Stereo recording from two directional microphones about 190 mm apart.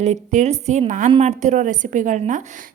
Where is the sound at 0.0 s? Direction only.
40° right (ahead or behind).